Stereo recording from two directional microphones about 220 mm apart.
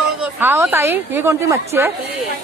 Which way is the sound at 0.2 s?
10° right (ahead or behind).